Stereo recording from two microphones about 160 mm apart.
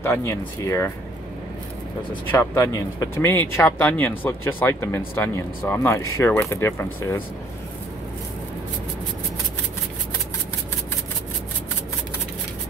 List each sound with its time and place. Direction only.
0.0 s speech: 15° left (ahead or behind)
2.3 s speech: 15° left (ahead or behind)